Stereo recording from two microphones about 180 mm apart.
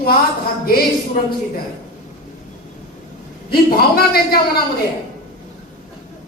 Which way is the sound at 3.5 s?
60° left (ahead or behind).